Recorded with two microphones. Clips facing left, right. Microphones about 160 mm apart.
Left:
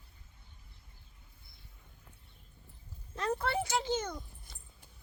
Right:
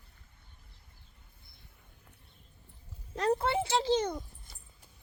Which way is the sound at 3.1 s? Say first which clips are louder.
Right 5 dB; 35° right (ahead or behind).